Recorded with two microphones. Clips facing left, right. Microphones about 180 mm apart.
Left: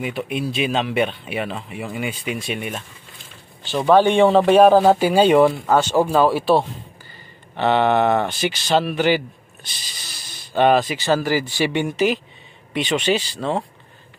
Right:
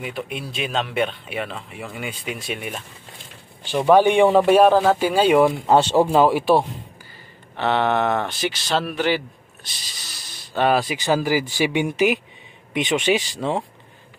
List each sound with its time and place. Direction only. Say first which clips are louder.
0.0 s speech: left 5 dB; 5° left (ahead or behind)
3.6 s speech: even; 10° right (ahead or behind)
5.7 s speech: right 1 dB; 25° right (ahead or behind)
7.5 s speech: left 3 dB; centre (ahead or behind)